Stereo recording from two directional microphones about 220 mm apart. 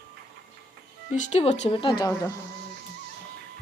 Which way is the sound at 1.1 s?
30° left (ahead or behind).